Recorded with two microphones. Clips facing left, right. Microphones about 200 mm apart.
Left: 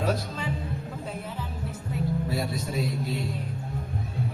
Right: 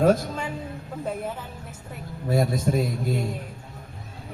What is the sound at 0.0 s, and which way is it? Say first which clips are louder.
Speech: right 8 dB; 50° right (ahead or behind).